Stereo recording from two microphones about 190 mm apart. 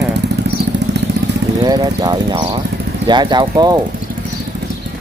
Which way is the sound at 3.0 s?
25° right (ahead or behind).